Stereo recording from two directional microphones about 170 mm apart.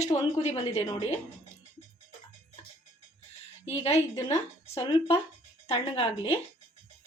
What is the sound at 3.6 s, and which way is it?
Speech, 40° left (ahead or behind).